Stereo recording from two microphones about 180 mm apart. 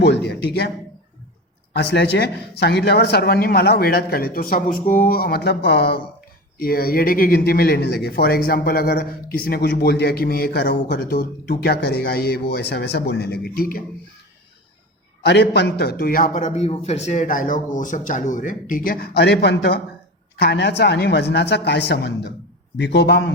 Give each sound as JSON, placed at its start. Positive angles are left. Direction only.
{"t": 0.0, "sound": "speech", "side_deg": 65}
{"t": 1.7, "sound": "speech", "side_deg": 70}
{"t": 15.2, "sound": "a man's voice", "side_deg": 65}